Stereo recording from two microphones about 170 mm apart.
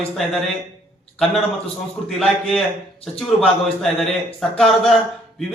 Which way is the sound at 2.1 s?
Centre (ahead or behind).